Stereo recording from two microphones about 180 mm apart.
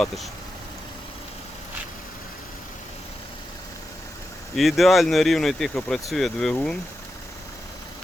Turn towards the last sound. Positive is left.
turn(degrees=0)  # may be behind; listen again after turning